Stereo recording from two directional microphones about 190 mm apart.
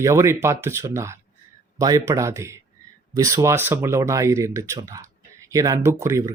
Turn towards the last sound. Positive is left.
turn(degrees=-15)  # may be behind; listen again after turning